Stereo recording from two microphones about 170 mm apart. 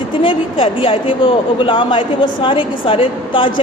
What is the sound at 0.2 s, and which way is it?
A man's voice, 30° left (ahead or behind).